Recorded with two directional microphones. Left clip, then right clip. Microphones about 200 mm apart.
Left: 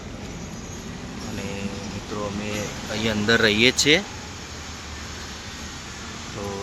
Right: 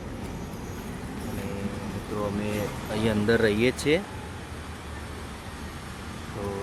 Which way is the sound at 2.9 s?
10° right (ahead or behind).